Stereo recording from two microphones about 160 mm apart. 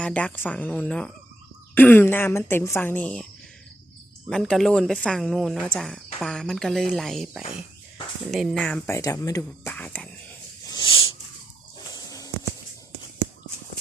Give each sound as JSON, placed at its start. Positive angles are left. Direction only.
{"t": 0.0, "sound": "speech", "side_deg": 10}
{"t": 4.3, "sound": "speech", "side_deg": 5}
{"t": 8.9, "sound": "speech", "side_deg": 20}
{"t": 9.7, "sound": "speech", "side_deg": 10}
{"t": 10.7, "sound": "wheeze", "side_deg": 30}
{"t": 11.9, "sound": "a sound", "side_deg": 20}